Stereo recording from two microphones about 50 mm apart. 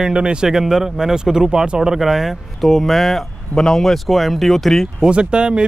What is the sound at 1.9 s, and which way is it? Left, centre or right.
Speech, centre.